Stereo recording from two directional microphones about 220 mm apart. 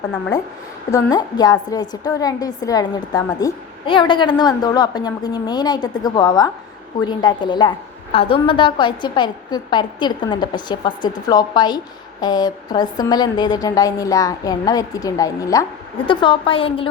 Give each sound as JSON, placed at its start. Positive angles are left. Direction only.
{"t": 0.9, "sound": "a woman's voice", "side_deg": 15}